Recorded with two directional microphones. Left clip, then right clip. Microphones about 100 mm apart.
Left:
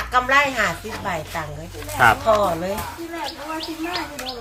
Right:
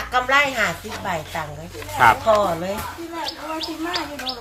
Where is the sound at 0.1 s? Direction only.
15° left (ahead or behind).